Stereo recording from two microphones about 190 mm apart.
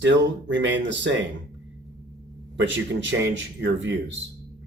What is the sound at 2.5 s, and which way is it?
Speech, 70° right (ahead or behind).